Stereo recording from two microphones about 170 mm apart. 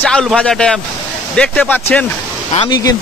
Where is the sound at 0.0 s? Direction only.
Centre (ahead or behind).